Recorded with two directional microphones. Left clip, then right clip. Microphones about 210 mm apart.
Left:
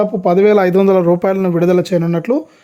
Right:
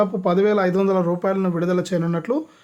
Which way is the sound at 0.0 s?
35° left (ahead or behind).